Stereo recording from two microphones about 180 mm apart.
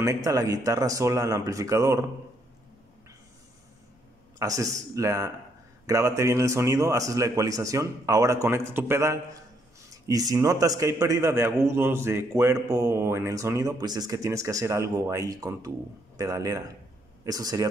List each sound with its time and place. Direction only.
0.0 s a man's voice: 15° right (ahead or behind)
4.4 s a man's voice: 20° right (ahead or behind)